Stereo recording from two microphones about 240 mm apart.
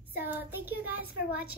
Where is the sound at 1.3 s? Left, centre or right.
Left.